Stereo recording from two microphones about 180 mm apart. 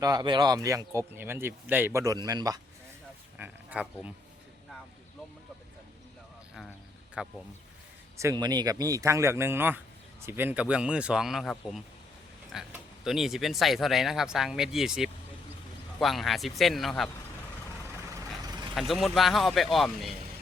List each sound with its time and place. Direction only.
0.0 s speech: 20° right (ahead or behind)
3.3 s speech: 10° right (ahead or behind)
7.2 s speech: 5° right (ahead or behind)
8.2 s speech: 20° right (ahead or behind); by 17.1 s centre (ahead or behind)
18.7 s speech: centre (ahead or behind)